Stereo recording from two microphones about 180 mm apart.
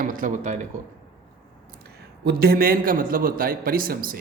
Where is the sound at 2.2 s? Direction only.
60° right (ahead or behind).